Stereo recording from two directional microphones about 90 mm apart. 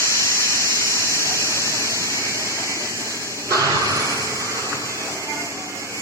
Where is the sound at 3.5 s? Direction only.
35° right (ahead or behind).